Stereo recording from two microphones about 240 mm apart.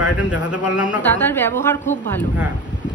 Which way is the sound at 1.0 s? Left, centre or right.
Centre.